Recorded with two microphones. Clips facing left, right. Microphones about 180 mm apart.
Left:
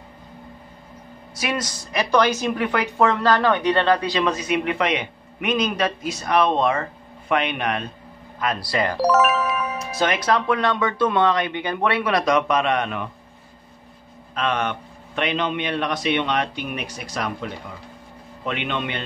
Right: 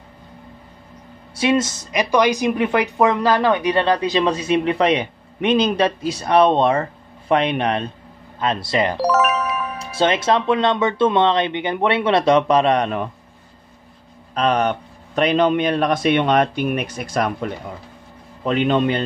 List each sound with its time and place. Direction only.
1.3 s speech: 25° right (ahead or behind)
4.2 s speech: 30° right (ahead or behind)
9.0 s speech: centre (ahead or behind)
9.8 s speech: 30° right (ahead or behind)
14.3 s speech: 35° right (ahead or behind)
18.4 s speech: 40° right (ahead or behind)